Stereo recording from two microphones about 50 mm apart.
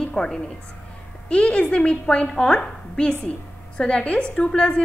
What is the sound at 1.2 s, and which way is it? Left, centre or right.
A woman's voice, left.